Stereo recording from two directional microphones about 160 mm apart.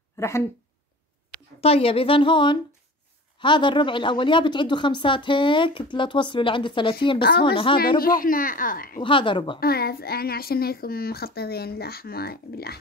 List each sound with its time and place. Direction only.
0.2 s a sound: 15° left (ahead or behind)
1.6 s a woman's voice: 35° left (ahead or behind)
8.0 s speech: 60° left (ahead or behind)
9.0 s a woman's voice: 30° left (ahead or behind)
9.6 s a woman's voice: 75° left (ahead or behind)